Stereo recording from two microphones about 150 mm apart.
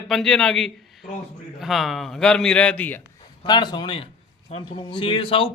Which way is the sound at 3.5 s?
30° left (ahead or behind).